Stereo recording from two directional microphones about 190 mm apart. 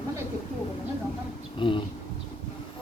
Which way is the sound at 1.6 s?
25° left (ahead or behind).